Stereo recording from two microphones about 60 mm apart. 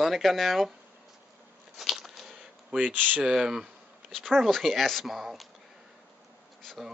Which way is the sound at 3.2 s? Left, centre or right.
Centre.